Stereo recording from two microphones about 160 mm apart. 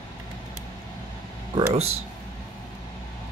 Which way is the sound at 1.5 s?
40° right (ahead or behind).